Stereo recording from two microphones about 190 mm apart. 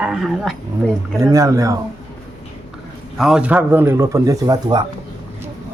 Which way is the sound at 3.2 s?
5° right (ahead or behind).